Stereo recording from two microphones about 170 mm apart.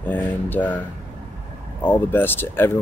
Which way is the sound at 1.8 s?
10° left (ahead or behind).